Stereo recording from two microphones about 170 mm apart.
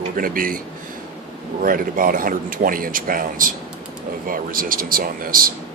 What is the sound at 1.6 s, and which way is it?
Speech, 55° right (ahead or behind).